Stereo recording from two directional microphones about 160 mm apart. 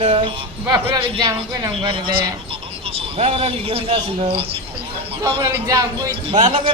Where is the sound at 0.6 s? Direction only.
20° right (ahead or behind).